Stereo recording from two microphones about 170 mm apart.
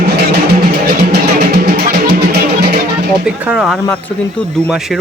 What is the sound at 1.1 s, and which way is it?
Music, 75° right (ahead or behind).